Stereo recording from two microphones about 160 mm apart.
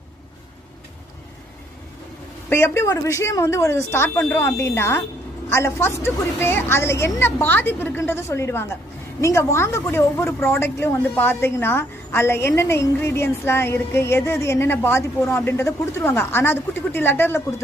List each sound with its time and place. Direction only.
2.5 s a woman's voice: 15° left (ahead or behind)